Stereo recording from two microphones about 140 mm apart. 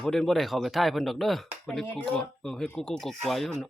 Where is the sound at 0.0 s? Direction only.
Centre (ahead or behind).